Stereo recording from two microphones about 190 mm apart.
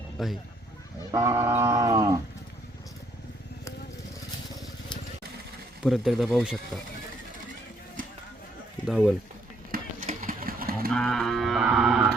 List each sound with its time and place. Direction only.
0.2 s livestock: centre (ahead or behind)
1.1 s livestock: 15° right (ahead or behind)
5.8 s livestock: centre (ahead or behind)
8.9 s livestock: centre (ahead or behind)
9.7 s a sound: 50° right (ahead or behind)
10.9 s livestock: 5° left (ahead or behind)